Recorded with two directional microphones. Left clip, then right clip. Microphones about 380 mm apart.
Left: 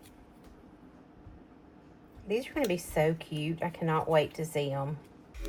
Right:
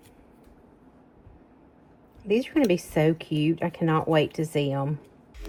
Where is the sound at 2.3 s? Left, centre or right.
Right.